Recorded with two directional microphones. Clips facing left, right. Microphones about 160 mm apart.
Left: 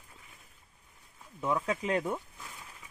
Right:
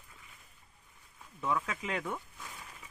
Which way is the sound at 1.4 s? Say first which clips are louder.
Left 4 dB; 30° left (ahead or behind).